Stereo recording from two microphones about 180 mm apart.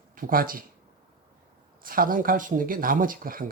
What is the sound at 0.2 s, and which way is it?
Speech, 50° right (ahead or behind).